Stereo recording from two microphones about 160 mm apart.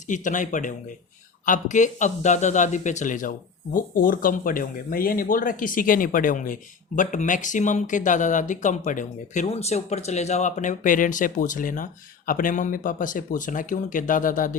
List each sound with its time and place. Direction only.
0.1 s speech: 50° left (ahead or behind)